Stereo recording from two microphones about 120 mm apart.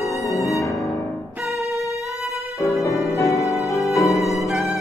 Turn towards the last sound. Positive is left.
turn(degrees=25)  # may be behind; listen again after turning